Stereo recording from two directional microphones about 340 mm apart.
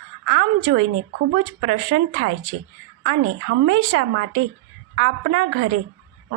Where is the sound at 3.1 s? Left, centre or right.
Right.